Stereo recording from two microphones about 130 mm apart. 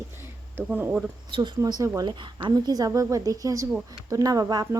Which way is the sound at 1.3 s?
35° right (ahead or behind).